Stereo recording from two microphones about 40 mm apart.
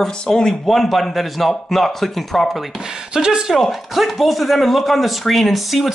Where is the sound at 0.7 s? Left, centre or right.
Centre.